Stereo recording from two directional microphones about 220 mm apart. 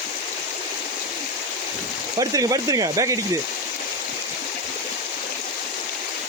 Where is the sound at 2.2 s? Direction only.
15° right (ahead or behind).